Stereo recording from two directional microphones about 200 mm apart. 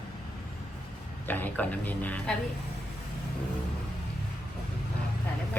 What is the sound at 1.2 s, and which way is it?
A woman's voice, 10° left (ahead or behind).